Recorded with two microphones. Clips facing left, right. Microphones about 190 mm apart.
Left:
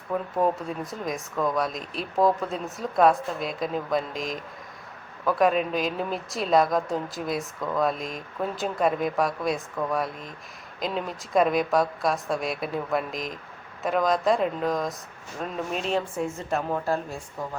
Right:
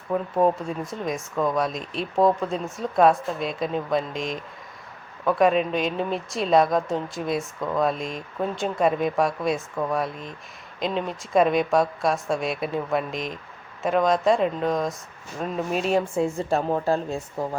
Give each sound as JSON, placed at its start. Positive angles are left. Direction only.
{"t": 0.6, "sound": "a woman's voice", "side_deg": 0}
{"t": 16.1, "sound": "a woman's voice", "side_deg": -30}